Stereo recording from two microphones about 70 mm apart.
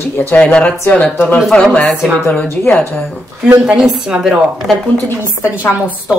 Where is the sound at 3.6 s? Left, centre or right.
Centre.